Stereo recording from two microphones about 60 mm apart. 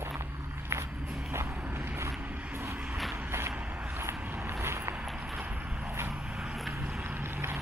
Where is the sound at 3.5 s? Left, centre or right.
Centre.